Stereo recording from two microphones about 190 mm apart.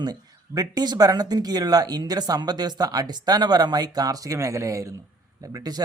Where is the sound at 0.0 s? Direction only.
20° right (ahead or behind).